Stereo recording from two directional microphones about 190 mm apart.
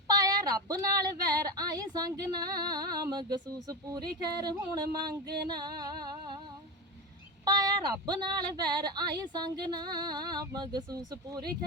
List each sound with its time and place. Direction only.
0.1 s a sound: 20° right (ahead or behind)
1.5 s a woman's voice: 20° right (ahead or behind)
7.4 s a woman's voice: 20° right (ahead or behind)